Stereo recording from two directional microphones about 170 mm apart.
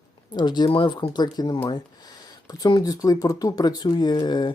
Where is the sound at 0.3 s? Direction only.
25° left (ahead or behind).